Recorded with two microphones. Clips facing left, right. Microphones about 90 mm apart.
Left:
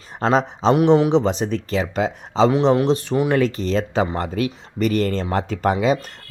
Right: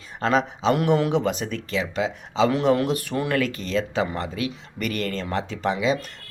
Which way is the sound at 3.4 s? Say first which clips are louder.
Left 5 dB; 35° left (ahead or behind).